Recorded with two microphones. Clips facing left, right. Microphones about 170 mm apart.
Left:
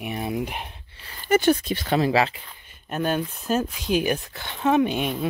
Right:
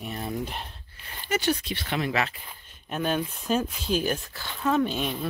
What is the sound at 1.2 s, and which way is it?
Speech, 50° left (ahead or behind).